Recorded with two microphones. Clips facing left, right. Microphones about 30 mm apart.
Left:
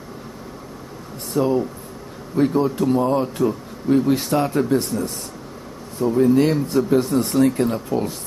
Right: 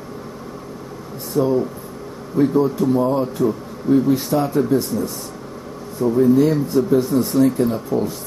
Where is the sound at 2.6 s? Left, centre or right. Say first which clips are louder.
Right 2 dB; left.